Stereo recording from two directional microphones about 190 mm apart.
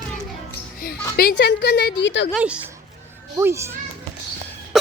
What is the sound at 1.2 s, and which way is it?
Speech, 60° left (ahead or behind).